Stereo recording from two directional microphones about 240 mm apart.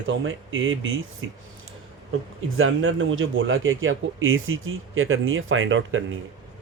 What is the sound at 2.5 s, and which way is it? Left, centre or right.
A man's voice, right.